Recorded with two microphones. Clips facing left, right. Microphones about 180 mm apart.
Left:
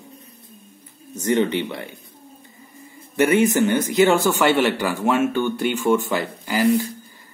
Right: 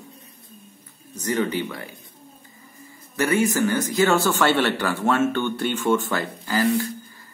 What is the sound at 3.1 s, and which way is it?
Speech, 25° left (ahead or behind).